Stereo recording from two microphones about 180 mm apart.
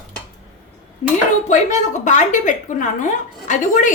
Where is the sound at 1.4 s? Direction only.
40° left (ahead or behind).